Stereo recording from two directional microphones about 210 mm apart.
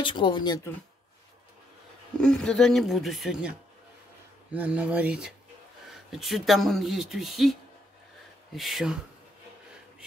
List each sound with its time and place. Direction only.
0.0 s speech: 25° left (ahead or behind)
2.1 s speech: 5° left (ahead or behind)
8.5 s speech: centre (ahead or behind)